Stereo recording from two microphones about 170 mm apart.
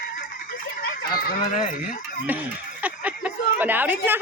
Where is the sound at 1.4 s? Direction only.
45° left (ahead or behind).